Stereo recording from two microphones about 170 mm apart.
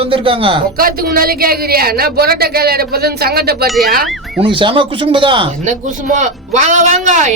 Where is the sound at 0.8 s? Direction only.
60° right (ahead or behind).